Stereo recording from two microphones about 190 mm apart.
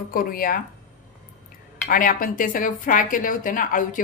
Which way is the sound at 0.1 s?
50° left (ahead or behind).